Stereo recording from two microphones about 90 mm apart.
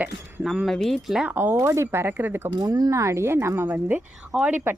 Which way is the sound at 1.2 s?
25° right (ahead or behind).